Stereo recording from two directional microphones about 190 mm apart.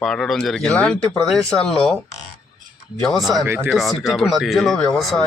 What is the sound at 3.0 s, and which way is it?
Speech, centre (ahead or behind).